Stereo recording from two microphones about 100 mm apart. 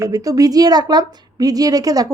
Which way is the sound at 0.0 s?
35° right (ahead or behind).